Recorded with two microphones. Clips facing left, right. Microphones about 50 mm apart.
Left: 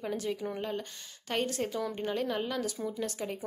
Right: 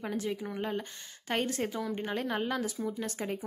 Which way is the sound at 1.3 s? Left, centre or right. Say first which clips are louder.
Even; right.